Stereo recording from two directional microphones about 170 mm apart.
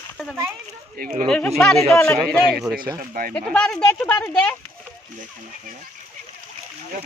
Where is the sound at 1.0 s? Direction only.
60° right (ahead or behind).